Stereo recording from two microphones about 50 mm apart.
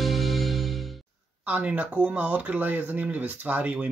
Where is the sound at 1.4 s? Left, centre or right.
Right.